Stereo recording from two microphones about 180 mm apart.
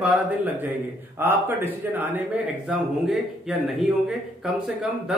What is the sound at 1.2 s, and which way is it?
Speech, 10° right (ahead or behind).